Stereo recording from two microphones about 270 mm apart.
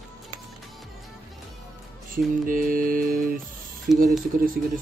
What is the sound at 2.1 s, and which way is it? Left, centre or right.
Speech, right.